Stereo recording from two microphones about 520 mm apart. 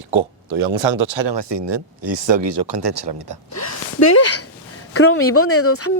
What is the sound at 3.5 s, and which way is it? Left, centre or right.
Speech, left.